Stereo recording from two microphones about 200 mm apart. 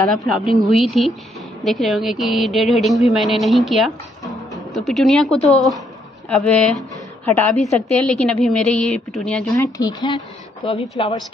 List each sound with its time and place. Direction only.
0.6 s a woman's voice: centre (ahead or behind)
9.5 s speech: 20° left (ahead or behind)